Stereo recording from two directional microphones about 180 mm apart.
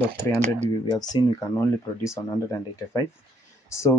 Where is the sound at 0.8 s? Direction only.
20° left (ahead or behind).